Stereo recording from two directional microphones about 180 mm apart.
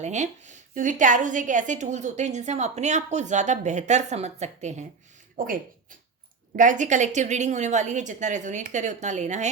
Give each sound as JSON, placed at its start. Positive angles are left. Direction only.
{"t": 0.0, "sound": "a woman's voice", "side_deg": -40}
{"t": 5.4, "sound": "speech", "side_deg": -50}
{"t": 6.6, "sound": "a woman's voice", "side_deg": -45}